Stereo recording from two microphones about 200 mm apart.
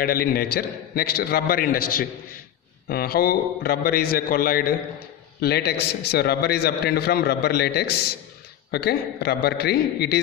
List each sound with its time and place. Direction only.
0.0 s a man's voice: 50° left (ahead or behind)